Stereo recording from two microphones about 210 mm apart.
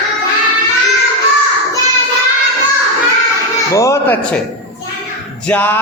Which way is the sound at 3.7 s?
15° left (ahead or behind).